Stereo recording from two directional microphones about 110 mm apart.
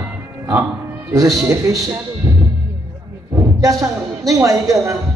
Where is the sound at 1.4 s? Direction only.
30° right (ahead or behind).